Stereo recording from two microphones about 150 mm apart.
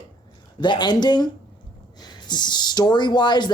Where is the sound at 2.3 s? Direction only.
30° left (ahead or behind).